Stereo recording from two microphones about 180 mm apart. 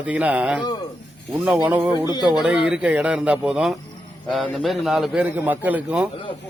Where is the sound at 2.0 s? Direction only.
20° left (ahead or behind).